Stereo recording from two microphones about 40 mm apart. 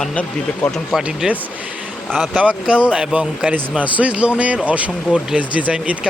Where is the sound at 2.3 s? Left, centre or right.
Right.